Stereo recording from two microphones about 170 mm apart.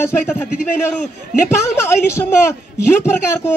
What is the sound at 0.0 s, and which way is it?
A man's voice, 15° left (ahead or behind).